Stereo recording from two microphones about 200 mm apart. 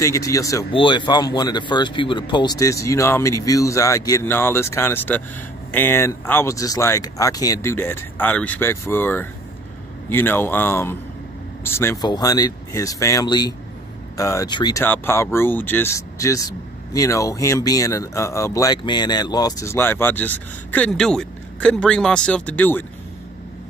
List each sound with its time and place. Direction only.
0.0 s speech: 15° left (ahead or behind)